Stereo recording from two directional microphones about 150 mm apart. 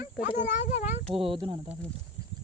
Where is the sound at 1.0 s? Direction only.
35° right (ahead or behind).